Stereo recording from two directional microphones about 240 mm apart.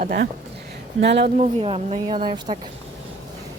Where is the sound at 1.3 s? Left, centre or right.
Right.